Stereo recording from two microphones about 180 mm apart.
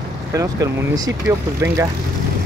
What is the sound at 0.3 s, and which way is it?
Speech, 20° right (ahead or behind).